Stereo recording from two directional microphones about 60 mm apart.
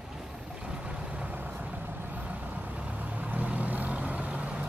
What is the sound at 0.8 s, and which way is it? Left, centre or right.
Vehicle, right.